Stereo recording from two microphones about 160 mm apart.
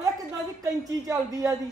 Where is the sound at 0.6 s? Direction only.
20° right (ahead or behind).